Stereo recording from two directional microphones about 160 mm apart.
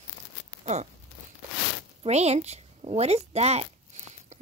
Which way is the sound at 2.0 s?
45° right (ahead or behind).